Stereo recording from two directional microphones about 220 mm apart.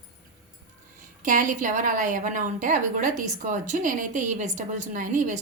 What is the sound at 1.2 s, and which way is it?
A woman's voice, 35° right (ahead or behind).